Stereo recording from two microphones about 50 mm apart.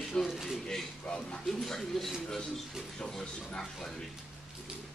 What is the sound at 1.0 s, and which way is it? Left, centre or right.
Speech, left.